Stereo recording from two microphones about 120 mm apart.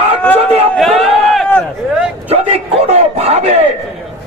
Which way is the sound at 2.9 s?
65° right (ahead or behind).